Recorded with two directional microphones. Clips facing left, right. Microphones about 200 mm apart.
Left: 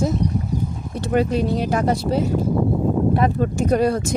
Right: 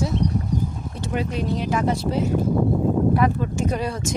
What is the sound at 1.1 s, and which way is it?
Speech, 40° left (ahead or behind).